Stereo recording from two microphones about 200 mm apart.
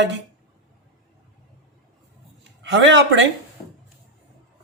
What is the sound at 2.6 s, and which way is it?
Speech, 60° right (ahead or behind).